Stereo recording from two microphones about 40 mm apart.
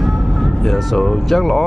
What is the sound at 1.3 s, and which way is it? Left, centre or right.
Speech, centre.